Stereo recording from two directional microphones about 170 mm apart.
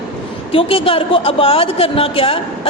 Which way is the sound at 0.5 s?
30° left (ahead or behind).